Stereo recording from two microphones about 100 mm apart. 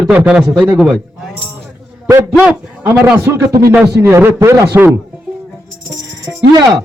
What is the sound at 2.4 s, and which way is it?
Speech, 15° right (ahead or behind).